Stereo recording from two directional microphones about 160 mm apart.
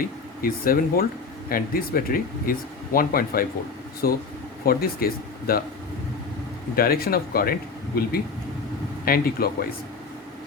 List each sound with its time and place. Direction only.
0.4 s speech: 65° left (ahead or behind)
6.7 s speech: 70° left (ahead or behind)
9.0 s speech: 70° left (ahead or behind)